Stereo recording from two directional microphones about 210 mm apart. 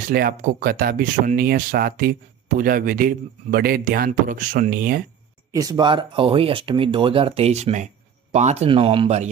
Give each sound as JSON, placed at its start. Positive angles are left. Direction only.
{"t": 0.1, "sound": "speech", "side_deg": -45}
{"t": 5.5, "sound": "speech", "side_deg": -15}